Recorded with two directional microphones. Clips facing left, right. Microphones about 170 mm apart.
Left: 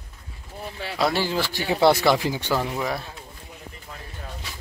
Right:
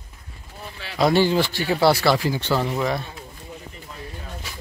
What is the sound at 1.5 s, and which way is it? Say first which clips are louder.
Speech: even; 20° left (ahead or behind).